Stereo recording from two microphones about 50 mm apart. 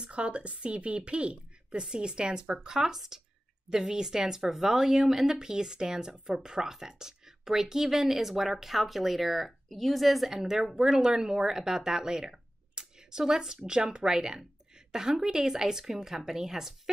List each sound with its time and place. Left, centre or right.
0.0 s speech: right